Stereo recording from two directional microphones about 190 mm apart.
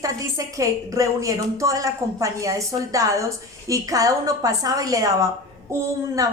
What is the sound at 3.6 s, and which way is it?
A woman's voice, 20° right (ahead or behind).